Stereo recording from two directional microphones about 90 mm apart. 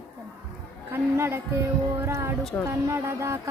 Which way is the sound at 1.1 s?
30° right (ahead or behind).